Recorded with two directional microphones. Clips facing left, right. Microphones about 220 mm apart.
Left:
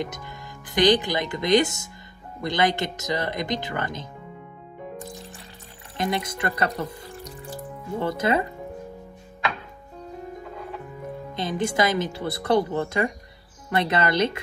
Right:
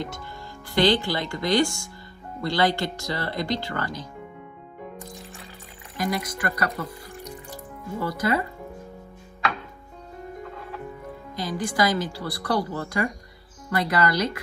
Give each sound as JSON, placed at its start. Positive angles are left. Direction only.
{"t": 0.0, "sound": "speech", "side_deg": 20}
{"t": 5.9, "sound": "speech", "side_deg": 25}
{"t": 8.1, "sound": "speech", "side_deg": 25}
{"t": 11.3, "sound": "speech", "side_deg": 25}